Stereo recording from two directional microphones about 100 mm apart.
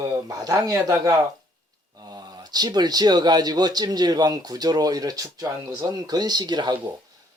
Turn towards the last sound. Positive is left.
turn(degrees=-45)  # may be behind; listen again after turning